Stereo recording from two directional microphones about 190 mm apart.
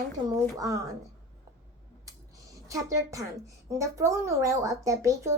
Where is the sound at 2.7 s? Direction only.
15° right (ahead or behind).